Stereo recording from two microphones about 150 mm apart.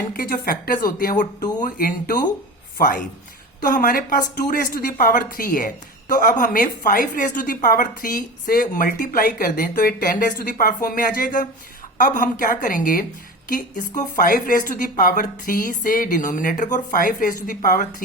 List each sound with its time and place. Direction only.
0.1 s a woman's voice: 75° left (ahead or behind)
0.9 s a woman's voice: 65° left (ahead or behind)
14.2 s a woman's voice: 65° left (ahead or behind)